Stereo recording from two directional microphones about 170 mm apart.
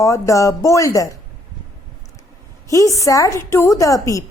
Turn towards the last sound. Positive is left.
turn(degrees=20)  # may be behind; listen again after turning